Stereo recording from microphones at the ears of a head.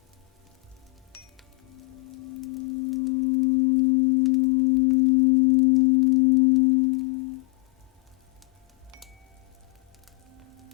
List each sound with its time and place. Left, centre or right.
1.6 s music: left
10.3 s music: right